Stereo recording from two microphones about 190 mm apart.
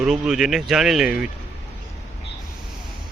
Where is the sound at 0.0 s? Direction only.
5° right (ahead or behind).